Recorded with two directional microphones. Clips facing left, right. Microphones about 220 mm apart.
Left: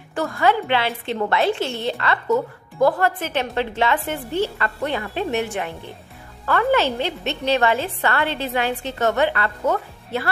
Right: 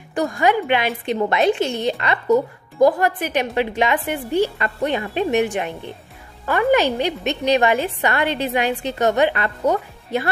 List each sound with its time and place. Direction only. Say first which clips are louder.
0.1 s a woman's voice: right 2 dB; 15° right (ahead or behind)